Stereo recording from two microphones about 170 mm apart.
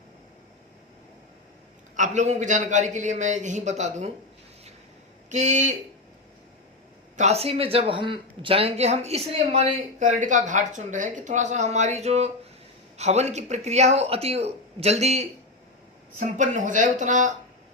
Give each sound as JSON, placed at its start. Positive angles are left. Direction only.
{"t": 2.0, "sound": "a man's voice", "side_deg": -45}
{"t": 5.3, "sound": "a man's voice", "side_deg": -45}
{"t": 7.2, "sound": "a man's voice", "side_deg": -40}